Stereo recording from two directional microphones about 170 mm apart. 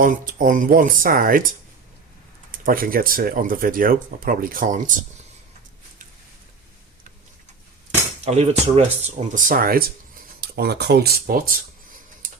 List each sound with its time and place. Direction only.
0.0 s speech: 50° right (ahead or behind)
2.5 s speech: 55° right (ahead or behind)
8.2 s speech: 40° right (ahead or behind); by 9.9 s 60° right (ahead or behind)
10.5 s speech: 70° right (ahead or behind)